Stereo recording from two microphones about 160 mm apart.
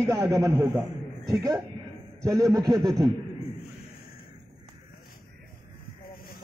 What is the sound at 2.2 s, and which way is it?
Speech, 20° right (ahead or behind).